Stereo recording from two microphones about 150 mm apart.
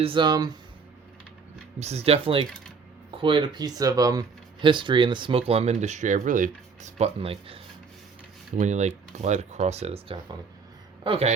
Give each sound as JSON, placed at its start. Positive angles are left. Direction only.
{"t": 0.0, "sound": "speech", "side_deg": -35}
{"t": 1.8, "sound": "speech", "side_deg": -45}
{"t": 8.5, "sound": "speech", "side_deg": -50}